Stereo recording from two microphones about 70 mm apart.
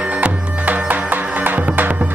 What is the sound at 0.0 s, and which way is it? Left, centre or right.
Music, centre.